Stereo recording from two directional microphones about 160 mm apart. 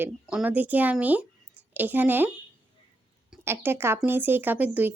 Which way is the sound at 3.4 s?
15° right (ahead or behind).